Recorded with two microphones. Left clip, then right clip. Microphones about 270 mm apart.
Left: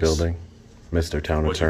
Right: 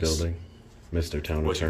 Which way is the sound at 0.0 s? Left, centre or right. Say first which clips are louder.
Left 6 dB; centre.